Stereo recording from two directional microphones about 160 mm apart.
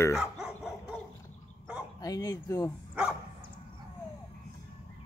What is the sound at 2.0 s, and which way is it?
Speech, 20° left (ahead or behind).